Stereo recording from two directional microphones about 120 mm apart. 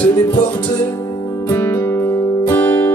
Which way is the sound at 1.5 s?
15° left (ahead or behind).